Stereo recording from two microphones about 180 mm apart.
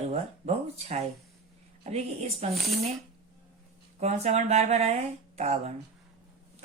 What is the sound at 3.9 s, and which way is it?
Speech, 40° right (ahead or behind).